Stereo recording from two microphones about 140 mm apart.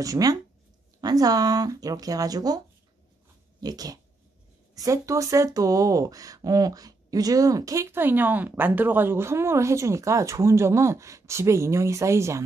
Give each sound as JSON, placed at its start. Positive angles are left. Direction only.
{"t": 0.0, "sound": "speech", "side_deg": -25}
{"t": 3.6, "sound": "speech", "side_deg": -25}